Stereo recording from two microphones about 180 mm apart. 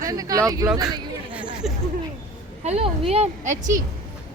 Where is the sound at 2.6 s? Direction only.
35° right (ahead or behind).